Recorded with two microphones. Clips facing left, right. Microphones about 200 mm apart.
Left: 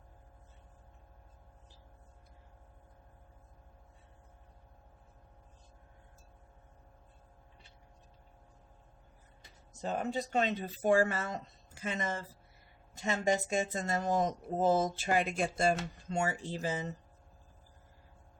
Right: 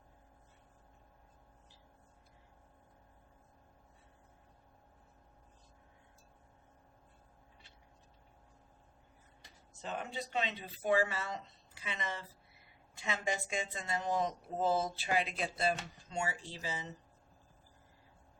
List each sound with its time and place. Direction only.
9.7 s speech: 40° left (ahead or behind)